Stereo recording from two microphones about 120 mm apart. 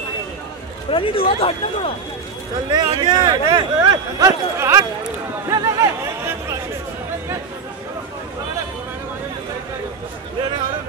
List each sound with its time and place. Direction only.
0.8 s speech: 50° left (ahead or behind)
2.7 s speech: 40° right (ahead or behind)